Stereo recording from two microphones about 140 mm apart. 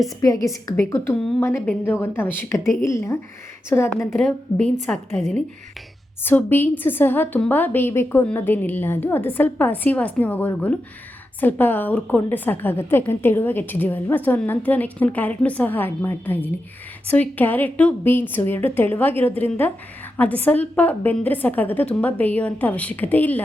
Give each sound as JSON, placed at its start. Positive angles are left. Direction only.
{"t": 0.2, "sound": "a woman's voice", "side_deg": 25}
{"t": 4.1, "sound": "a woman's voice", "side_deg": 0}
{"t": 6.2, "sound": "a woman's voice", "side_deg": 15}